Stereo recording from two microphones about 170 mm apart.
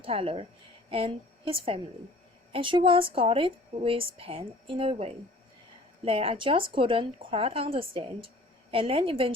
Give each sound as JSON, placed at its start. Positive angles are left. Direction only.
{"t": 0.0, "sound": "a woman's voice", "side_deg": -35}